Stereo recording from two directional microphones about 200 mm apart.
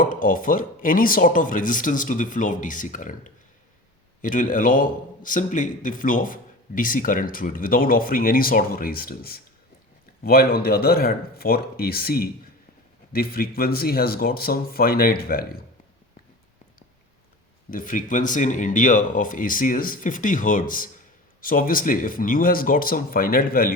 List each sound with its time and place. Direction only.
0.0 s a man's voice: 45° left (ahead or behind)
17.7 s a man's voice: 45° left (ahead or behind)